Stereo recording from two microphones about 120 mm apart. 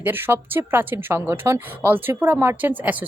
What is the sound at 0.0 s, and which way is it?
A woman's voice, 15° right (ahead or behind).